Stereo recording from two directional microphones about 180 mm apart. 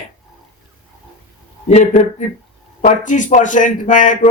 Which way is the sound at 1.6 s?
40° left (ahead or behind).